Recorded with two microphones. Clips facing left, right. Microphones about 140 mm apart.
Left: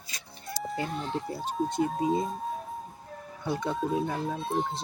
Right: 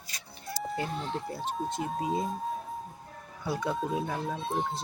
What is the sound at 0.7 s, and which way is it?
Speech, centre (ahead or behind).